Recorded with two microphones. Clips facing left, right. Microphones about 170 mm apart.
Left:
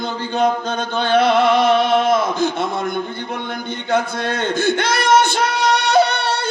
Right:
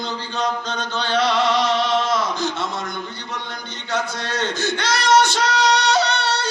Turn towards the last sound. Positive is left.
turn(degrees=55)  # may be behind; listen again after turning